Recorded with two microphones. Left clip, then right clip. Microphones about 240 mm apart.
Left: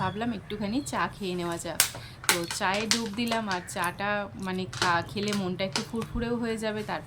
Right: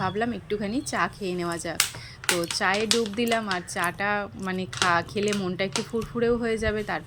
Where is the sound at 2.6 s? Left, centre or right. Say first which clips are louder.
Right 4 dB; centre.